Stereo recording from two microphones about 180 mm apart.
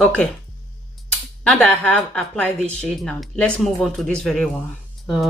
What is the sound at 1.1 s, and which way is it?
Speech, 5° left (ahead or behind).